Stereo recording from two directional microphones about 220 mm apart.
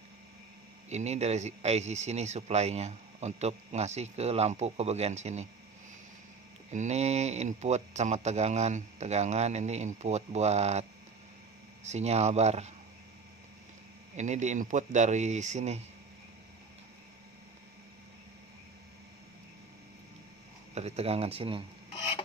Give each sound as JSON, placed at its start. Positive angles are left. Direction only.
{"t": 0.8, "sound": "speech", "side_deg": -30}
{"t": 6.7, "sound": "speech", "side_deg": -30}
{"t": 14.1, "sound": "speech", "side_deg": -30}
{"t": 20.7, "sound": "speech", "side_deg": -30}